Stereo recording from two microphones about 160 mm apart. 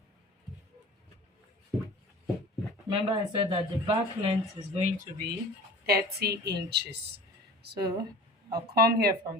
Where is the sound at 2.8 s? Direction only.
30° right (ahead or behind).